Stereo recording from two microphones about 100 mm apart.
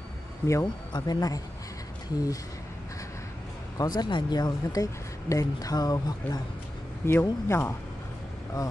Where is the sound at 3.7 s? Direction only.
45° left (ahead or behind).